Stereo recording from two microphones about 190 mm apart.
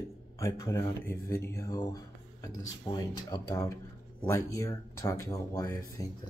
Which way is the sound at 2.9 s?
5° left (ahead or behind).